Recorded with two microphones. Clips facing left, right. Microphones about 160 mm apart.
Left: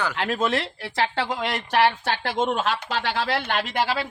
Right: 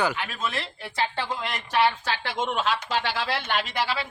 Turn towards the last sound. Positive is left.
turn(degrees=50)  # may be behind; listen again after turning